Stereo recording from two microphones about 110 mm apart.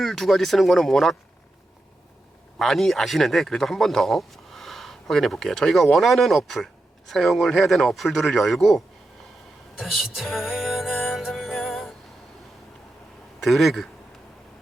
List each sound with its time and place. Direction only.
0.0 s speech: centre (ahead or behind)
2.6 s speech: centre (ahead or behind)
9.7 s music: centre (ahead or behind)
13.4 s speech: centre (ahead or behind)